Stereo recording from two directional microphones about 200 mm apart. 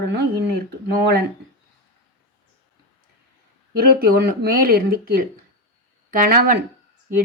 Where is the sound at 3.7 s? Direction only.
50° right (ahead or behind).